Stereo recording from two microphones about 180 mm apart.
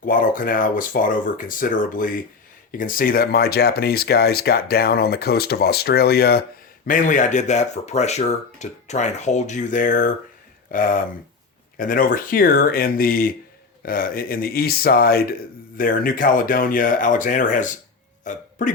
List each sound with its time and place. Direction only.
0.0 s speech: 50° left (ahead or behind)
6.8 s speech: 45° left (ahead or behind)
18.2 s burping: 45° left (ahead or behind)